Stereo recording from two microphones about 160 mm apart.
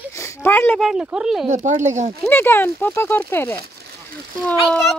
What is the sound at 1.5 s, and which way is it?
Speech, 50° right (ahead or behind).